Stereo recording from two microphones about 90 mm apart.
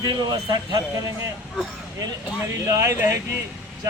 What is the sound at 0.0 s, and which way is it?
Speech, 50° right (ahead or behind).